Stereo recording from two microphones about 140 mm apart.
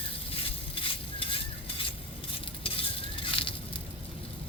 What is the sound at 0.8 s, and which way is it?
Stir, 40° left (ahead or behind).